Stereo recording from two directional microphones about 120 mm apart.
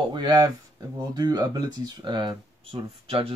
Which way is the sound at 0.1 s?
35° right (ahead or behind).